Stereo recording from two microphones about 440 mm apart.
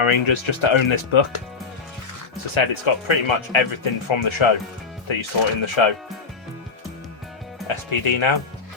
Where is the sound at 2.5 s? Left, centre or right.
Left.